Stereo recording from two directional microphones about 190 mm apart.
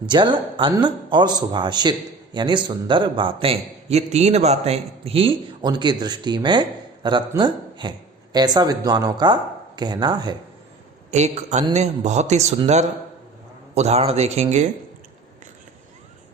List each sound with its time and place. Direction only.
0.0 s a man's voice: 25° right (ahead or behind)
11.1 s speech: 35° right (ahead or behind)